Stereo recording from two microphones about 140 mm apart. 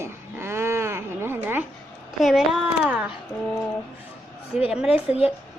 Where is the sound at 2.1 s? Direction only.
5° right (ahead or behind).